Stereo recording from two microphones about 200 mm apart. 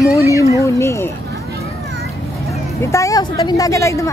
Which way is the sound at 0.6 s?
15° left (ahead or behind).